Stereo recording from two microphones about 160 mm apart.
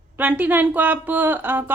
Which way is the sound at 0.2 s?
10° right (ahead or behind).